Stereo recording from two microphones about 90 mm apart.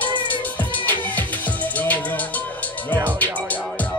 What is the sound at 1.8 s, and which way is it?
Music, 20° left (ahead or behind).